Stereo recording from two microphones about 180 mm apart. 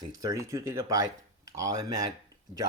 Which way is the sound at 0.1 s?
20° right (ahead or behind).